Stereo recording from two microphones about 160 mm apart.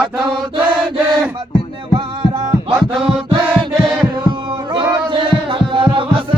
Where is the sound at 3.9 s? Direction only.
30° right (ahead or behind).